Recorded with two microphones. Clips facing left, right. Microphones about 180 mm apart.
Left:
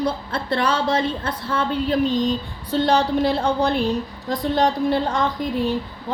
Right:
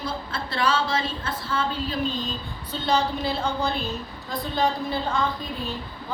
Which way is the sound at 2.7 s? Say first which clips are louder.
Left 6 dB; 75° left (ahead or behind).